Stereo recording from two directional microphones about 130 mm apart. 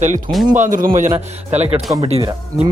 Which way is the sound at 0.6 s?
90° right.